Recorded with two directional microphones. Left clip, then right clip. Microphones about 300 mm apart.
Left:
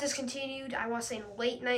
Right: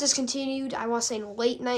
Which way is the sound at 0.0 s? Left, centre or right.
Centre.